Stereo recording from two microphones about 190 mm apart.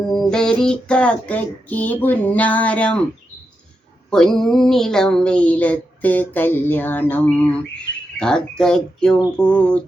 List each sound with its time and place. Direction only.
0.1 s speech: centre (ahead or behind)
4.1 s speech: 5° left (ahead or behind)